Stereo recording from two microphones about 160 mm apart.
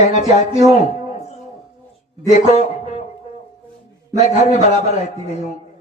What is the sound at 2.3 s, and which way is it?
Speech, 45° left (ahead or behind).